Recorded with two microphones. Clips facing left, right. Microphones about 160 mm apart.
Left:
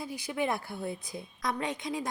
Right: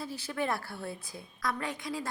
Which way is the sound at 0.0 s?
15° left (ahead or behind).